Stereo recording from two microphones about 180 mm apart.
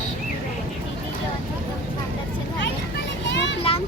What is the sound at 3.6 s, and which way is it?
Children playing, 30° left (ahead or behind).